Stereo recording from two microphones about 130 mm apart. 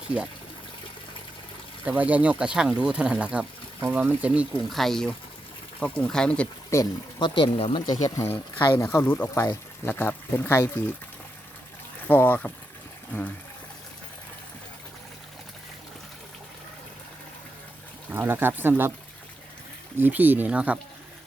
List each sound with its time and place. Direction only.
1.8 s speech: 10° right (ahead or behind)
4.7 s speech: centre (ahead or behind)
6.7 s speech: 25° left (ahead or behind)
7.2 s speech: 40° left (ahead or behind)
8.0 s speech: 20° left (ahead or behind)
12.0 s speech: 15° left (ahead or behind)
18.1 s speech: 15° right (ahead or behind)
20.0 s speech: 15° right (ahead or behind)